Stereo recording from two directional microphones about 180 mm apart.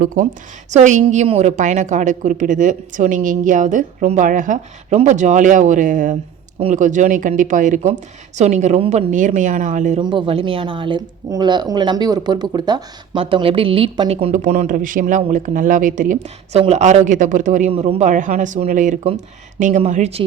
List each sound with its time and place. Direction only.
0.0 s speech: 50° right (ahead or behind)
10.0 s speech: 25° right (ahead or behind); by 17.7 s 45° right (ahead or behind)
17.7 s speech: 35° right (ahead or behind)